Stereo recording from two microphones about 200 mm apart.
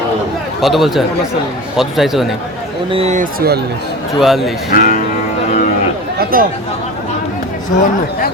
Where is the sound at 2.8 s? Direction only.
30° right (ahead or behind); by 3.6 s 50° right (ahead or behind).